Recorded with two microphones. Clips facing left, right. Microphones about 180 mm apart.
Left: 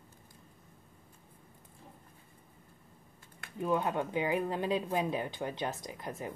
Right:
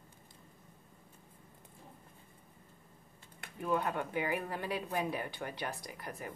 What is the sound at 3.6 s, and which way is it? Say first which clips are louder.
Speech: left 3 dB; 20° left (ahead or behind).